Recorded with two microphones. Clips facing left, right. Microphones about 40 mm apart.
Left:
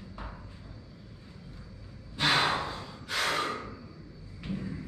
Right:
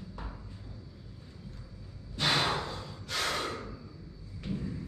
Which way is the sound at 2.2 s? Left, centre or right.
Centre.